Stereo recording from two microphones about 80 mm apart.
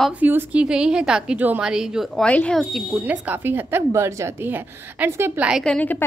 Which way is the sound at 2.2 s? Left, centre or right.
Centre.